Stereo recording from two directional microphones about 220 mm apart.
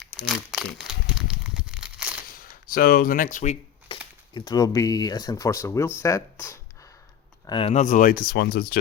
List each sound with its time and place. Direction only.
0.0 s crumpling: centre (ahead or behind)
2.4 s camera: 40° left (ahead or behind)
4.4 s speech: 15° left (ahead or behind); by 8.8 s 45° left (ahead or behind)